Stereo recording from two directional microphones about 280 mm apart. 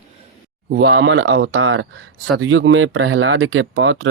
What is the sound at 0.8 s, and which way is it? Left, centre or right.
Speech, right.